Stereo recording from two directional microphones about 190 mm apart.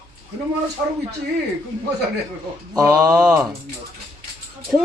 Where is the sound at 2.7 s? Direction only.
20° right (ahead or behind).